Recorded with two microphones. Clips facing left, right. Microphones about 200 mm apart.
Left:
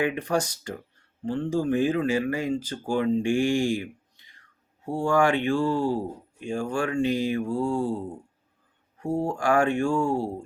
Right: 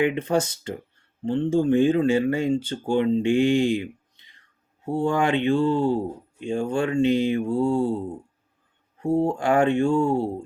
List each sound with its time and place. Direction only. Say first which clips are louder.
0.0 s speech: right 3 dB; 25° right (ahead or behind)